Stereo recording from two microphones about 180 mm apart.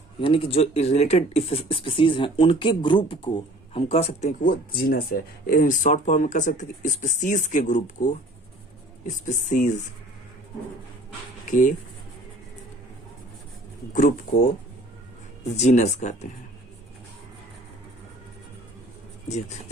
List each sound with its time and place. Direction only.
0.2 s speech: 30° left (ahead or behind)
13.9 s speech: 50° left (ahead or behind)
15.5 s speech: 40° left (ahead or behind)
19.3 s speech: 40° left (ahead or behind)